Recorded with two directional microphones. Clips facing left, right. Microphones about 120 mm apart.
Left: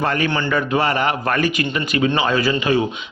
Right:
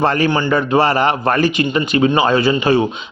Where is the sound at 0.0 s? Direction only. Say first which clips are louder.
Right 5 dB; 30° right (ahead or behind).